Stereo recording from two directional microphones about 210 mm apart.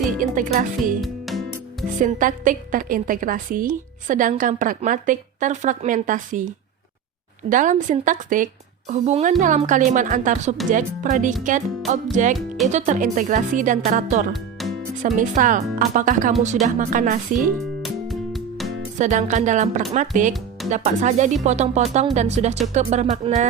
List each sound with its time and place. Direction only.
0.2 s a woman's voice: 40° right (ahead or behind)
1.0 s music: centre (ahead or behind)
2.0 s a woman's voice: 40° right (ahead or behind)
7.5 s a woman's voice: 35° right (ahead or behind)
14.6 s music: centre (ahead or behind)
15.0 s a woman's voice: 40° right (ahead or behind)
17.8 s music: centre (ahead or behind)
18.9 s a woman's voice: 35° right (ahead or behind)